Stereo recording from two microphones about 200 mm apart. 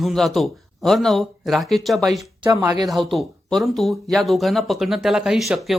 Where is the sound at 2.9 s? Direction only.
Centre (ahead or behind).